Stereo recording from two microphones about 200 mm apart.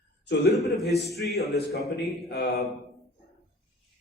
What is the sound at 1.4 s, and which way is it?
A man's voice, 50° left (ahead or behind).